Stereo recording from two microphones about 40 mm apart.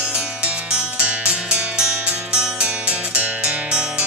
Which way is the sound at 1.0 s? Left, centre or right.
Right.